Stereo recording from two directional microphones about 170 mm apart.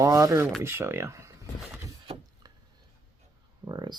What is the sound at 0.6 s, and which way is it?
Speech, 15° right (ahead or behind).